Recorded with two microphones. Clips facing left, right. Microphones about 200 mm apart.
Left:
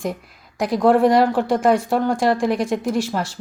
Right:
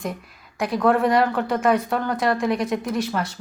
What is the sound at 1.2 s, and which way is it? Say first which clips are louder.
Speech: left 4 dB; 30° left (ahead or behind).